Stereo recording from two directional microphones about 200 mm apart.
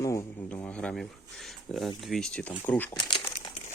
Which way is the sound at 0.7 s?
5° left (ahead or behind).